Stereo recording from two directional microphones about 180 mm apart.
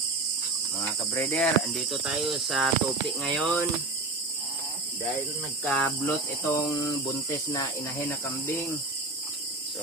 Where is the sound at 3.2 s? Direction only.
5° left (ahead or behind).